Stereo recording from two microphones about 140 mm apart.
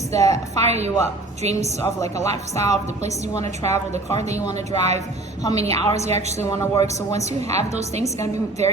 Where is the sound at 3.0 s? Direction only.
55° right (ahead or behind).